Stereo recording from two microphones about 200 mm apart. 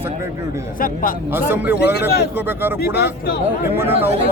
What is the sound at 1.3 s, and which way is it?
Speech, 10° right (ahead or behind).